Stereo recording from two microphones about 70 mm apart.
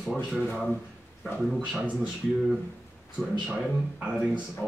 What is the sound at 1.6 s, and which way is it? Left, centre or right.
Speech, centre.